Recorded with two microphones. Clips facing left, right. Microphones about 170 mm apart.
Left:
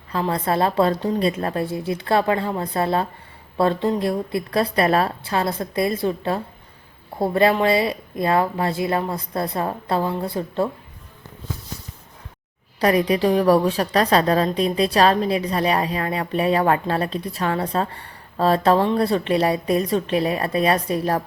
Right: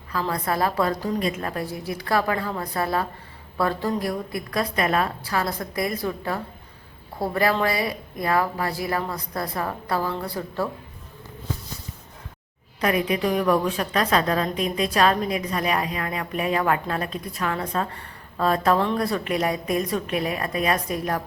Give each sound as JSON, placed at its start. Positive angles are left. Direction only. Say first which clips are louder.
{"t": 0.1, "sound": "a woman's voice", "louder": "left 4 dB", "side_deg": 30}
{"t": 12.8, "sound": "a woman's voice", "louder": "left 5 dB", "side_deg": 35}